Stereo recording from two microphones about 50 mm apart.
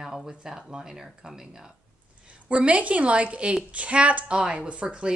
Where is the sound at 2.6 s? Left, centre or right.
Right.